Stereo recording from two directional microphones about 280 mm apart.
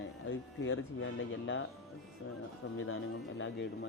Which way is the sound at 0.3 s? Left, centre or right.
Left.